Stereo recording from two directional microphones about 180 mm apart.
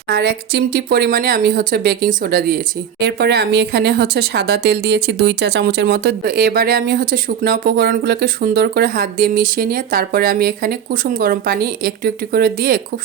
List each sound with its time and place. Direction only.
0.1 s speech: 65° right (ahead or behind)
3.0 s speech: 65° right (ahead or behind)